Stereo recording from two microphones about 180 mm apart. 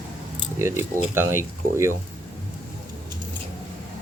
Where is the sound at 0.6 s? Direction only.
15° right (ahead or behind).